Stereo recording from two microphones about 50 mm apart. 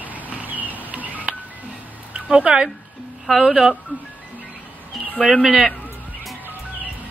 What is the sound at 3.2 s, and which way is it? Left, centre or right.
Speech, centre.